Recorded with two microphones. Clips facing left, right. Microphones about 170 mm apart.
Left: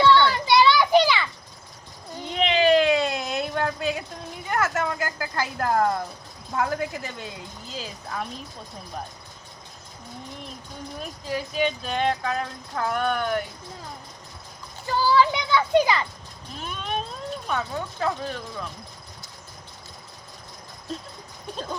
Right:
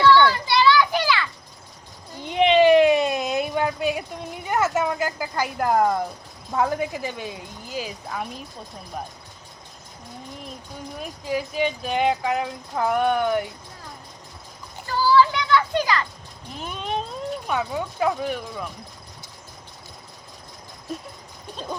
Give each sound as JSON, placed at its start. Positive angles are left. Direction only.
{"t": 0.0, "sound": "children playing", "side_deg": 20}
{"t": 2.3, "sound": "a sound", "side_deg": -20}
{"t": 4.4, "sound": "speech", "side_deg": -20}
{"t": 11.0, "sound": "speech", "side_deg": -10}
{"t": 14.8, "sound": "children playing", "side_deg": 15}
{"t": 16.6, "sound": "a sound", "side_deg": -15}
{"t": 17.4, "sound": "speech", "side_deg": -10}